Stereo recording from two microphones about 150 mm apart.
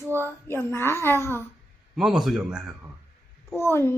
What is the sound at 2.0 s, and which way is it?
Speech, centre (ahead or behind).